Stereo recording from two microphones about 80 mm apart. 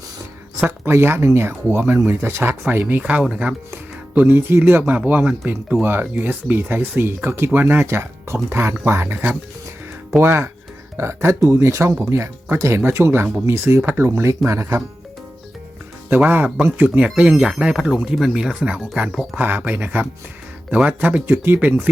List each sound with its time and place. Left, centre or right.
0.9 s speech: right
10.2 s speech: right
16.2 s speech: right; by 18.5 s centre
18.6 s speech: centre